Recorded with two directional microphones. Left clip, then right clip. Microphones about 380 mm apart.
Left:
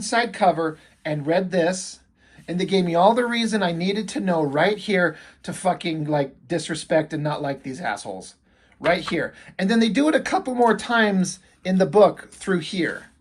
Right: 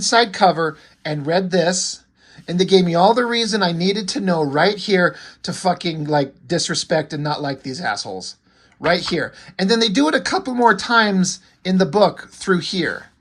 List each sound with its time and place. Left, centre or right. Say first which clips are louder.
0.0 s speech: right 5 dB; centre